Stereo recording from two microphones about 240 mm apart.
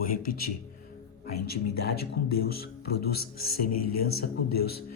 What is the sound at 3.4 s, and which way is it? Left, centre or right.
Speech, left.